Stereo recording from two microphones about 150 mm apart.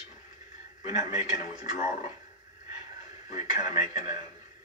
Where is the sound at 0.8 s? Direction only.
25° right (ahead or behind).